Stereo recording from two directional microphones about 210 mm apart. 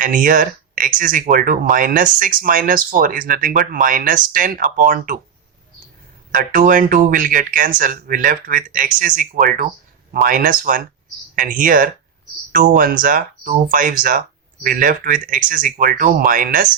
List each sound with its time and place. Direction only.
0.0 s speech: 40° right (ahead or behind)
6.3 s speech: 40° right (ahead or behind)